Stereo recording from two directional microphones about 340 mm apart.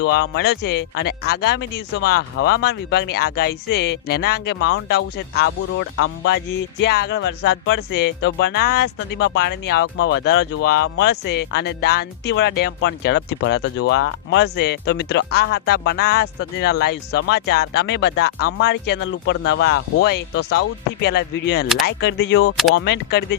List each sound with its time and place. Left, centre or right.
0.0 s speech: left